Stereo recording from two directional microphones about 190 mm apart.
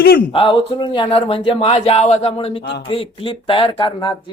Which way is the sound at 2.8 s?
30° left (ahead or behind).